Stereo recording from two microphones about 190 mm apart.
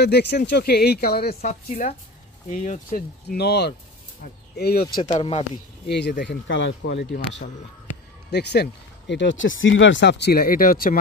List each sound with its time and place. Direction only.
0.0 s speech: 60° left (ahead or behind)
1.5 s speech: 40° left (ahead or behind)
3.3 s speech: 60° left (ahead or behind)
5.1 s speech: 30° left (ahead or behind)
5.9 s speech: 60° left (ahead or behind)